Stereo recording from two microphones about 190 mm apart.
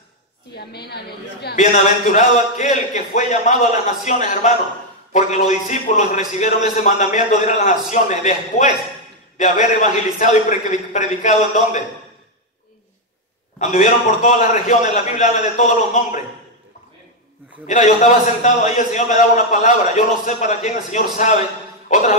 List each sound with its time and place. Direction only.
0.6 s a woman's voice: 60° left (ahead or behind)
1.6 s a man's voice: 40° left (ahead or behind)
13.6 s a man's voice: 40° left (ahead or behind)
17.6 s a man's voice: 40° left (ahead or behind)